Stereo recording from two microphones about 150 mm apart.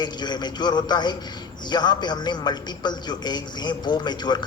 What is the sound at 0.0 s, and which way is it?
A man's voice, 30° left (ahead or behind).